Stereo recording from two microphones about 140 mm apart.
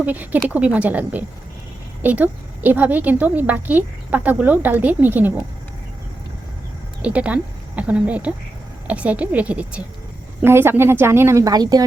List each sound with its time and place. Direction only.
0.0 s a woman's voice: 10° right (ahead or behind)
7.0 s a woman's voice: 10° right (ahead or behind); by 11.8 s 30° right (ahead or behind)